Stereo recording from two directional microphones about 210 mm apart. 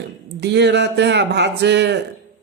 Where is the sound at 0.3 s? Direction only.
55° right (ahead or behind).